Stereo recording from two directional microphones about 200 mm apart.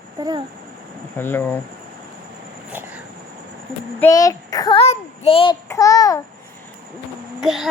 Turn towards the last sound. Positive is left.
turn(degrees=0)  # may be behind; listen again after turning